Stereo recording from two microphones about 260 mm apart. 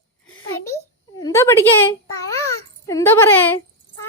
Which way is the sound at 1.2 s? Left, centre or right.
Centre.